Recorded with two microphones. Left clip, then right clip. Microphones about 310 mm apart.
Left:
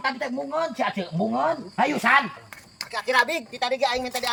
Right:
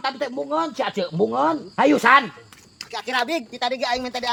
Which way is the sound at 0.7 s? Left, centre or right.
Centre.